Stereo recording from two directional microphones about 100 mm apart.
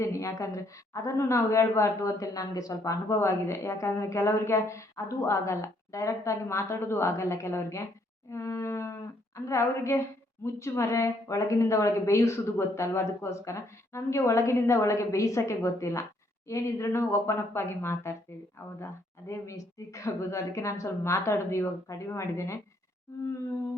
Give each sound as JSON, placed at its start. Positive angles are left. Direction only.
{"t": 0.0, "sound": "a woman's voice", "side_deg": 30}
{"t": 19.3, "sound": "a woman's voice", "side_deg": 30}